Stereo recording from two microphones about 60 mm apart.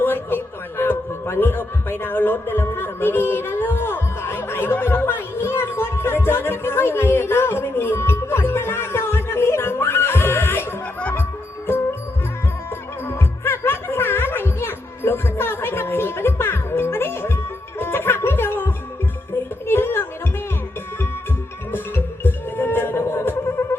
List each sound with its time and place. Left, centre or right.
0.0 s a sound: left
11.1 s music: left
13.1 s music: left
21.7 s music: left